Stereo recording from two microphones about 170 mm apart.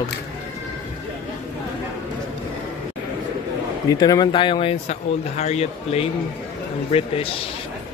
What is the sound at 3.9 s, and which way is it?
Speech, 25° left (ahead or behind).